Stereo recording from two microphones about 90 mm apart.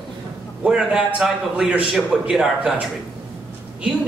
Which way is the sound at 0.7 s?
5° right (ahead or behind).